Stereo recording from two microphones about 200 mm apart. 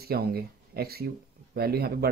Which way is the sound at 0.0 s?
50° right (ahead or behind).